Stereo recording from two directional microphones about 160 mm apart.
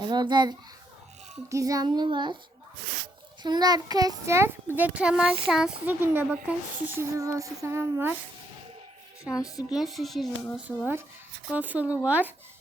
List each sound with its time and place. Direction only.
0.0 s a child's voice: 25° right (ahead or behind)
3.4 s a child's voice: 25° right (ahead or behind)
9.3 s a woman's voice: 20° left (ahead or behind)
9.6 s speech: centre (ahead or behind)
10.7 s a child's voice: 10° right (ahead or behind)